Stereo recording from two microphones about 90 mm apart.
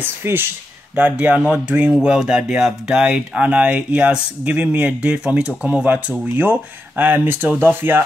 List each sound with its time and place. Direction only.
0.0 s speech: 25° right (ahead or behind)